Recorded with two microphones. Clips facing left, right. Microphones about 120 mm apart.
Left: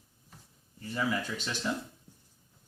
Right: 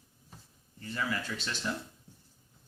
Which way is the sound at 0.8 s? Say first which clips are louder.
Left 3 dB; 15° left (ahead or behind).